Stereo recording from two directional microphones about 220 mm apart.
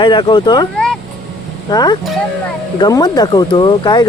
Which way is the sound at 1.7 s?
20° left (ahead or behind).